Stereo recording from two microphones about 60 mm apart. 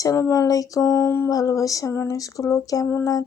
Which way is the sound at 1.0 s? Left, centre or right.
Left.